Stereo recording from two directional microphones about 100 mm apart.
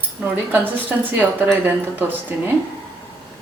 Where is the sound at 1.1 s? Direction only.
20° right (ahead or behind).